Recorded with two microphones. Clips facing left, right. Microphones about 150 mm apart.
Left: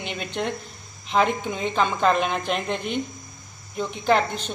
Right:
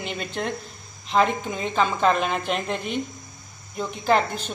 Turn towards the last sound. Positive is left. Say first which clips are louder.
# even
turn(degrees=-5)  # may be behind; listen again after turning